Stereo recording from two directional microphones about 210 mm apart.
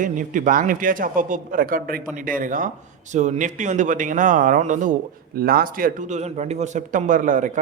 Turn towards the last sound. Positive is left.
turn(degrees=-40)  # may be behind; listen again after turning